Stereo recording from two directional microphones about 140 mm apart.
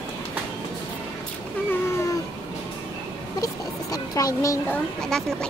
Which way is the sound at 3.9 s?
25° left (ahead or behind).